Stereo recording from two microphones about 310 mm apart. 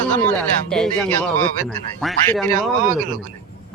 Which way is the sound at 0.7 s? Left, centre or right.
Centre.